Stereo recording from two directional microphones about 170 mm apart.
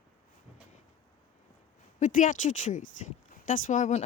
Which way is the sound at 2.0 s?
50° left (ahead or behind).